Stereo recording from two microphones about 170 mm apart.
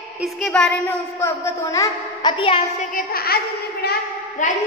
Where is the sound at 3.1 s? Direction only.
65° left (ahead or behind).